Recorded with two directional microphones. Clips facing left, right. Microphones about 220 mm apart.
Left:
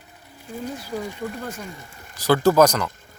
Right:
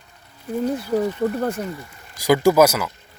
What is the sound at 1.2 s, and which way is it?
Speech, 40° right (ahead or behind).